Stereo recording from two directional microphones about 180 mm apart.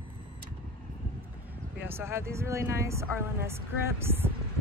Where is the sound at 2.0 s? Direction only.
15° right (ahead or behind).